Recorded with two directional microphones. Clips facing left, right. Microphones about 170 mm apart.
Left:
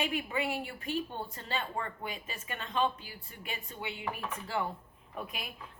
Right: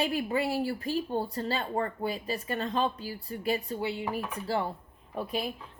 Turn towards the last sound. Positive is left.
turn(degrees=-30)  # may be behind; listen again after turning